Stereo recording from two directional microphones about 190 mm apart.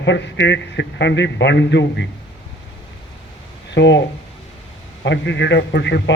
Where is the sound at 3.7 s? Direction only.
70° left (ahead or behind).